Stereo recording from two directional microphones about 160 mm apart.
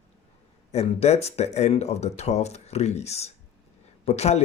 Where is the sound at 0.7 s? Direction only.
40° left (ahead or behind).